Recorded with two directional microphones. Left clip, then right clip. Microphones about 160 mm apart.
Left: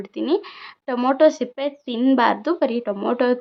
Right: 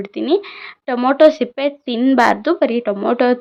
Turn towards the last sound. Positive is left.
turn(degrees=-10)  # may be behind; listen again after turning